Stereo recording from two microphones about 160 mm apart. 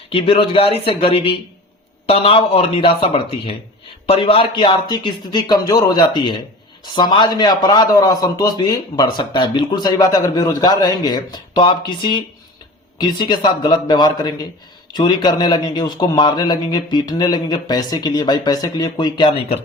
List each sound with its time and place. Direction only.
0.1 s a man's voice: 35° left (ahead or behind)